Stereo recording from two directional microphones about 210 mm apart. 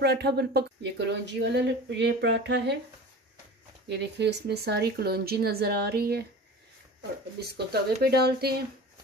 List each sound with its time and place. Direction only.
0.0 s speech: 50° right (ahead or behind)
3.9 s speech: 55° right (ahead or behind)
7.3 s speech: 50° right (ahead or behind)